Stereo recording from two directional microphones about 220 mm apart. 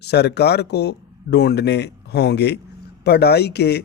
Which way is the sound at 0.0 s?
50° left (ahead or behind).